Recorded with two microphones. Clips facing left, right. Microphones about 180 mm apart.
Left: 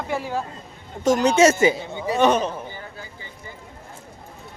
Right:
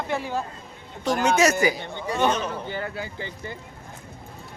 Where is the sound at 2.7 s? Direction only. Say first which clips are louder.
Right 7 dB; 80° right.